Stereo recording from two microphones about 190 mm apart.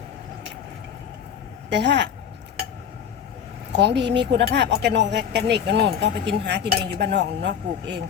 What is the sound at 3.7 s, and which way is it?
Speech, 65° right (ahead or behind).